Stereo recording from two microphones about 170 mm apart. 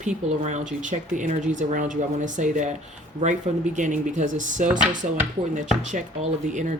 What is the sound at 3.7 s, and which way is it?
Speech, 50° right (ahead or behind).